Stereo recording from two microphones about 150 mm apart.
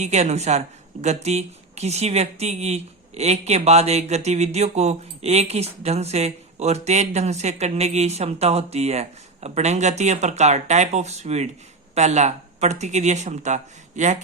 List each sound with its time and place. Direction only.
0.0 s speech: 50° right (ahead or behind)